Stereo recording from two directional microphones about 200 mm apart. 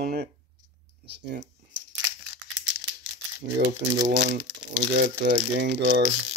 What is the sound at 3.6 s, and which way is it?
Speech, 50° right (ahead or behind).